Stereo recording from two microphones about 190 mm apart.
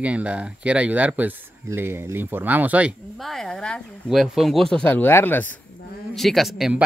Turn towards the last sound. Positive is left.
turn(degrees=0)  # may be behind; listen again after turning